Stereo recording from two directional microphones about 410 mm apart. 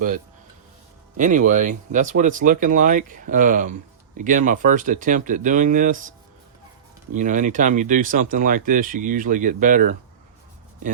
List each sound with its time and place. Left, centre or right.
1.1 s speech: centre